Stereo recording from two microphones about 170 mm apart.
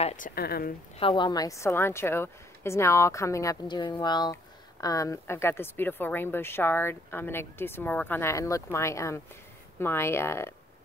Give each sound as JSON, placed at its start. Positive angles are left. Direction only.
{"t": 0.2, "sound": "speech", "side_deg": 65}
{"t": 0.9, "sound": "a woman's voice", "side_deg": 30}